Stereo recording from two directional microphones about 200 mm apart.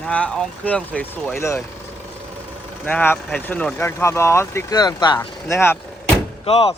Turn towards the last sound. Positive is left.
turn(degrees=30)  # may be behind; listen again after turning